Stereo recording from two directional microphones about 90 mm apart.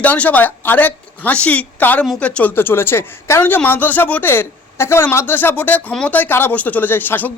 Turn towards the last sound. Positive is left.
turn(degrees=20)  # may be behind; listen again after turning